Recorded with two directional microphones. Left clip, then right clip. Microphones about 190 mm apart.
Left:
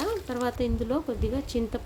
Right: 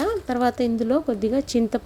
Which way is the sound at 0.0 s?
35° right (ahead or behind).